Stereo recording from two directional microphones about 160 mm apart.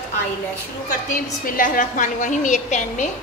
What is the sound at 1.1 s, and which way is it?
A woman's voice, 55° left (ahead or behind).